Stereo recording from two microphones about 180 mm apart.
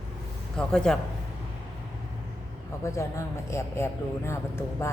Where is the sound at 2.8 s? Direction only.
15° left (ahead or behind).